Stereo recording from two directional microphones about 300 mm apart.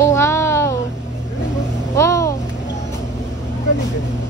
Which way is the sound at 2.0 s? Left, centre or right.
Centre.